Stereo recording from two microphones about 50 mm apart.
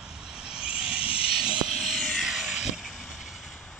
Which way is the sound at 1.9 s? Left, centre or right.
Centre.